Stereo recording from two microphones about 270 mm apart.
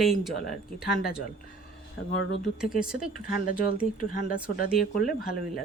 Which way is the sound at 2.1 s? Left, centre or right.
Left.